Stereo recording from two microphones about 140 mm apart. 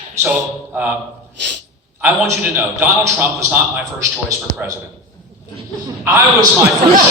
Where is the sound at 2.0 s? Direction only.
15° right (ahead or behind).